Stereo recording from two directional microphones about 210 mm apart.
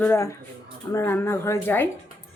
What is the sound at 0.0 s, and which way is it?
Speech, 10° left (ahead or behind).